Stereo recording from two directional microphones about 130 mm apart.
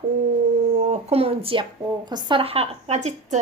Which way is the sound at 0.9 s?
50° right (ahead or behind).